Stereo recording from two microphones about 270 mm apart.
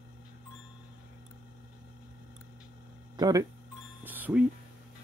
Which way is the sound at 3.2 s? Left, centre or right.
Centre.